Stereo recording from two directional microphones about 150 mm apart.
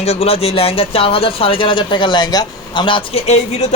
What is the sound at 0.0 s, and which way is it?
A man's voice, 40° left (ahead or behind).